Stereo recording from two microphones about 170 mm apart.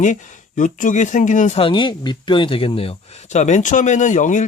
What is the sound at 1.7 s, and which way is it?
Speech, 30° left (ahead or behind).